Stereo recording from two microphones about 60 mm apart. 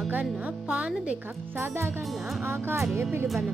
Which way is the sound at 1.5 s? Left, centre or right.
Right.